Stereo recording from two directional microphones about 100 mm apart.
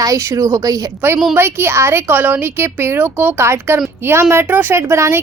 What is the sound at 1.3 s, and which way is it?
A woman's voice, 25° right (ahead or behind).